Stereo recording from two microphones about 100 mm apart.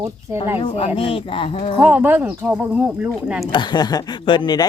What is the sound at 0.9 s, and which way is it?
Speech, 65° left (ahead or behind).